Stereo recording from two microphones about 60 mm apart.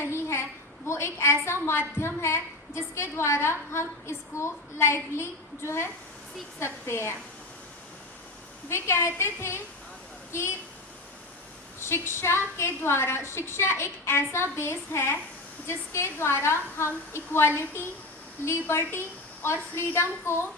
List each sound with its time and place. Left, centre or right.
0.0 s a woman's voice: left
8.7 s a woman's voice: left
11.8 s a woman's voice: left